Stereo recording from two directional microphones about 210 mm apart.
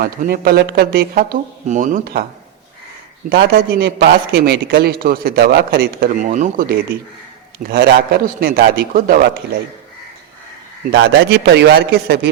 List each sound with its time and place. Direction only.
0.0 s a man's voice: 45° right (ahead or behind)
3.2 s a man's voice: 45° right (ahead or behind)
7.7 s a man's voice: 50° right (ahead or behind)
10.9 s a man's voice: 50° right (ahead or behind)